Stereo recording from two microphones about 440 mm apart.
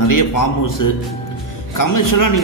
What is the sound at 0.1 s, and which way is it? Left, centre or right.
A man's voice, left.